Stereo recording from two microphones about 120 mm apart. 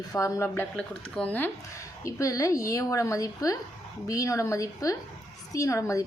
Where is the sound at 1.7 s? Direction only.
25° left (ahead or behind).